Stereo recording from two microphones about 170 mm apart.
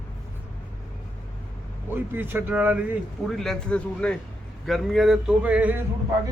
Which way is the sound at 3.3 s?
Centre (ahead or behind).